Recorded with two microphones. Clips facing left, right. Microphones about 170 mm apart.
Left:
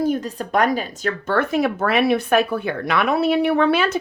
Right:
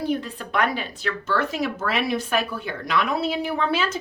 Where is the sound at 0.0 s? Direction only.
45° left (ahead or behind).